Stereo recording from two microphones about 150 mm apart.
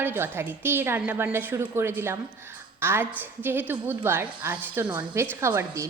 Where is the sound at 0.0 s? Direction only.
15° right (ahead or behind).